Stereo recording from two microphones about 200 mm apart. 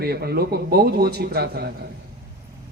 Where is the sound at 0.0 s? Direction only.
50° right (ahead or behind).